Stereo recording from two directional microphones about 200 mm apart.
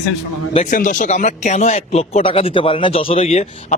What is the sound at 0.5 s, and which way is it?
Speech, 35° left (ahead or behind).